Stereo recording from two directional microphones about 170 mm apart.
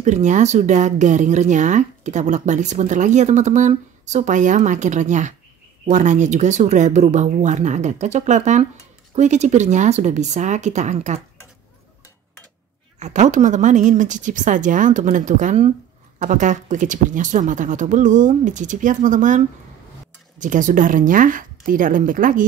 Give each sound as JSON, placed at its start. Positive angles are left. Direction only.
{"t": 0.0, "sound": "speech", "side_deg": -45}
{"t": 13.0, "sound": "speech", "side_deg": -45}